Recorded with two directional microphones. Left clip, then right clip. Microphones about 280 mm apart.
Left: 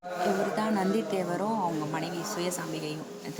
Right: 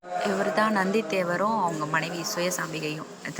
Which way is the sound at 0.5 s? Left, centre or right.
Centre.